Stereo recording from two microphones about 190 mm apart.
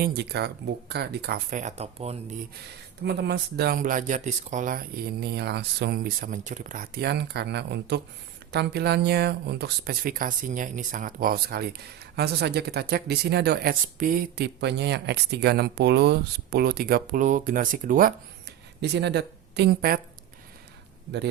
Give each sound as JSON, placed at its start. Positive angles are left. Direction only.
{"t": 0.0, "sound": "speech", "side_deg": -55}
{"t": 1.5, "sound": "speech", "side_deg": -40}
{"t": 3.0, "sound": "speech", "side_deg": -60}
{"t": 18.8, "sound": "speech", "side_deg": -65}